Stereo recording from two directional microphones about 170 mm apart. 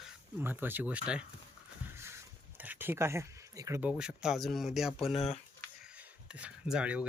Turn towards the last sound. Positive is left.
turn(degrees=-5)  # may be behind; listen again after turning